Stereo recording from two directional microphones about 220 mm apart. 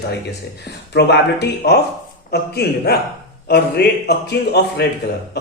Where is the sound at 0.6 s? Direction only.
50° left (ahead or behind).